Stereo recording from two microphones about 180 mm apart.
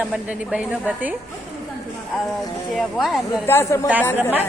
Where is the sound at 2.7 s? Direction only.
Centre (ahead or behind).